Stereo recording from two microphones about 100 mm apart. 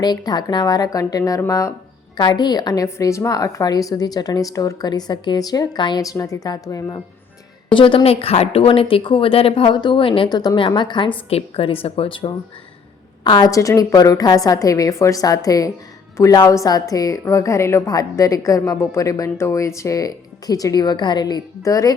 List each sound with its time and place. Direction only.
0.0 s a woman's voice: 45° left (ahead or behind)
2.1 s a woman's voice: 50° left (ahead or behind)
6.0 s a woman's voice: 35° left (ahead or behind)
7.7 s a woman's voice: 60° left (ahead or behind)
10.2 s a woman's voice: 45° left (ahead or behind); by 12.3 s 60° left (ahead or behind)
13.2 s a woman's voice: 45° left (ahead or behind)